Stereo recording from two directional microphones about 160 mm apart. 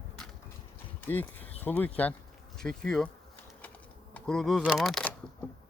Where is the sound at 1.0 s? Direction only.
10° left (ahead or behind).